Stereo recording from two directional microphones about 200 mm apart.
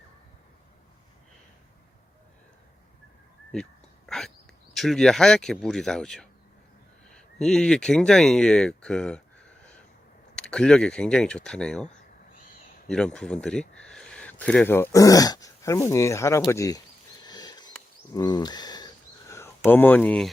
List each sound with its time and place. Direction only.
3.5 s whispering: centre (ahead or behind)
4.7 s speech: centre (ahead or behind)
10.3 s speech: 5° left (ahead or behind)
12.9 s speech: 5° left (ahead or behind)
17.2 s a sound: 20° left (ahead or behind); by 20.3 s 5° left (ahead or behind)